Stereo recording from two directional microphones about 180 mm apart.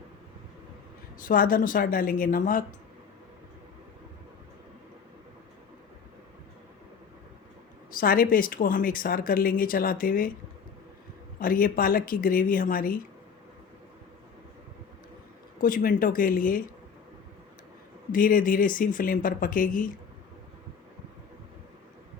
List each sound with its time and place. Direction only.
1.2 s a woman's voice: 50° left (ahead or behind)
7.9 s a woman's voice: 50° left (ahead or behind)
11.3 s a woman's voice: 50° left (ahead or behind)
15.6 s a woman's voice: 50° left (ahead or behind)
18.1 s a woman's voice: 50° left (ahead or behind)